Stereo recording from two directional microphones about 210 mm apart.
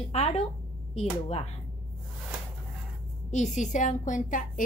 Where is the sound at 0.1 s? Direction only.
30° left (ahead or behind).